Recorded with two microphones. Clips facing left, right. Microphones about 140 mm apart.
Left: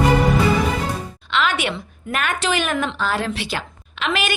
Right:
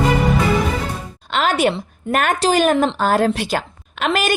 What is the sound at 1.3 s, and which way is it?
A woman's voice, 40° right (ahead or behind).